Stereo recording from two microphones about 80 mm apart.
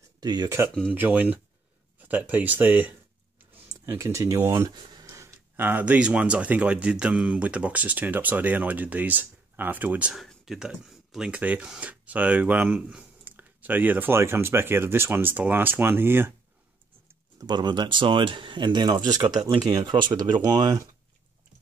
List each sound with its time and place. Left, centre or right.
0.2 s speech: right
0.9 s speech: right
3.8 s speech: right
4.5 s a sound: right
5.6 s speech: right
10.1 s speech: centre
10.9 s a sound: centre
11.2 s speech: centre
17.5 s speech: right
18.9 s speech: right
19.7 s speech: right
20.4 s speech: right